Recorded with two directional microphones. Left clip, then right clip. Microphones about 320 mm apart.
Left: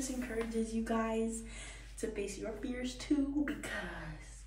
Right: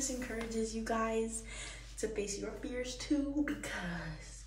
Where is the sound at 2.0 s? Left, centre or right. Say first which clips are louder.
Right 1 dB; centre.